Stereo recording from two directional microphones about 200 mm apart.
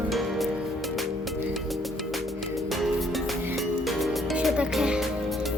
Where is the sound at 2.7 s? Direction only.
Centre (ahead or behind).